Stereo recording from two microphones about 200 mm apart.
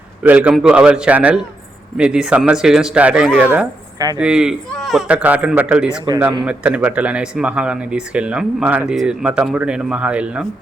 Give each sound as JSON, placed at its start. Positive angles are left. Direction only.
{"t": 0.2, "sound": "a man's voice", "side_deg": -5}
{"t": 3.9, "sound": "speech", "side_deg": -20}
{"t": 4.2, "sound": "a man's voice", "side_deg": -5}